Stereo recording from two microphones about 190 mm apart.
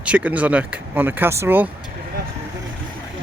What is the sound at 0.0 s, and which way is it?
Speech, 5° right (ahead or behind).